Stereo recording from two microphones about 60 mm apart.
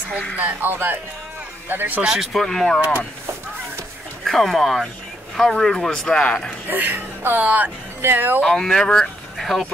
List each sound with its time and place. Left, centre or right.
0.4 s speech: right
2.0 s speech: centre
2.4 s speech: centre
4.2 s a man's voice: centre
6.7 s speech: right
8.5 s a man's voice: centre
9.4 s speech: centre